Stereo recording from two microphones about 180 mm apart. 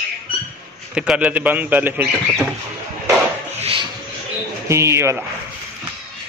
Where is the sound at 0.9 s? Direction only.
5° right (ahead or behind).